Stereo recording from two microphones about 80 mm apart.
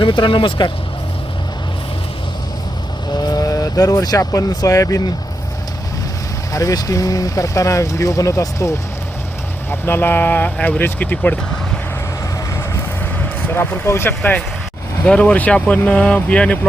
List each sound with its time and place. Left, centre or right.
0.0 s speech: left
3.2 s speech: left
6.5 s speech: left
9.6 s speech: left
13.1 s vehicle: left
15.0 s speech: centre